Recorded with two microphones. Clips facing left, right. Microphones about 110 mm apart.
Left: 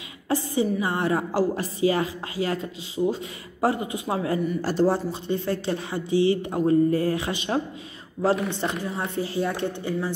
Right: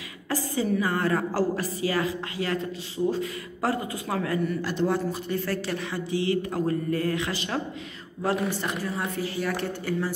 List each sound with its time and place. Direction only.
0.3 s a woman's voice: 20° left (ahead or behind)
4.6 s a woman's voice: 40° left (ahead or behind)